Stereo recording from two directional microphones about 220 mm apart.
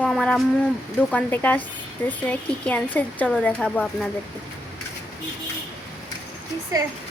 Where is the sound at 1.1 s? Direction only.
10° left (ahead or behind).